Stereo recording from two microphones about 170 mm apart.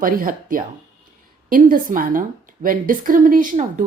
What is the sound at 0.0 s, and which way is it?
Speech, 55° right (ahead or behind).